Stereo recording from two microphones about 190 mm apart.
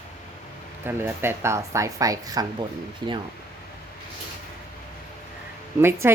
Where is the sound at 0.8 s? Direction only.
10° right (ahead or behind).